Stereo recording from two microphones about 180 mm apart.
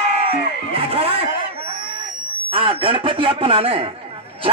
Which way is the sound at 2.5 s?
30° right (ahead or behind).